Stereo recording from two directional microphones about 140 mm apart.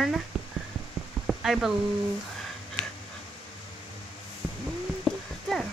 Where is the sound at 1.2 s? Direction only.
Centre (ahead or behind).